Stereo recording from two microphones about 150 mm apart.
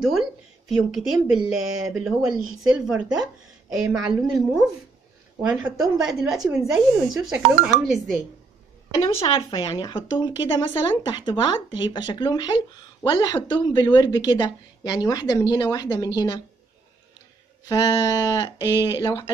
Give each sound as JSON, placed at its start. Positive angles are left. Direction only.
{"t": 0.0, "sound": "speech", "side_deg": -5}
{"t": 1.4, "sound": "speech", "side_deg": -20}
{"t": 2.0, "sound": "speech", "side_deg": -5}
{"t": 9.5, "sound": "a woman's voice", "side_deg": 30}
{"t": 17.6, "sound": "a woman's voice", "side_deg": 25}